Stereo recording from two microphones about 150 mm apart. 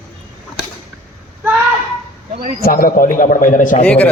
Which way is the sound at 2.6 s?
75° left (ahead or behind).